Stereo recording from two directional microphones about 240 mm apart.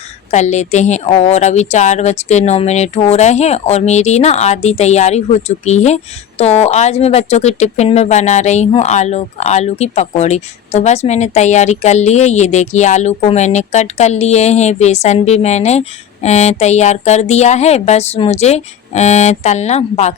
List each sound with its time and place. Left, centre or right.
0.3 s speech: left